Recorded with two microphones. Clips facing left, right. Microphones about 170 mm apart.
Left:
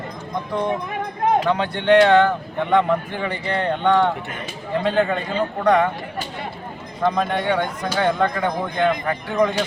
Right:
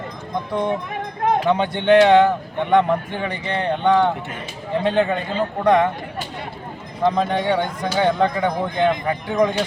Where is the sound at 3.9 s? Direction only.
20° right (ahead or behind).